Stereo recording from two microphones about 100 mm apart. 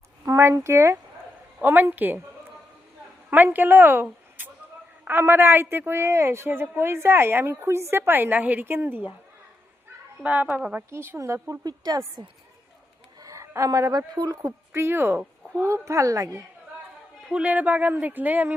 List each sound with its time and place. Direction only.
0.3 s a woman's voice: 30° right (ahead or behind)
3.2 s a woman's voice: 20° right (ahead or behind)
10.2 s speech: 15° right (ahead or behind)
10.9 s a woman's voice: 25° right (ahead or behind)
11.6 s a woman's voice: 45° right (ahead or behind)
13.1 s a woman's voice: 35° right (ahead or behind)
17.2 s speech: 10° right (ahead or behind)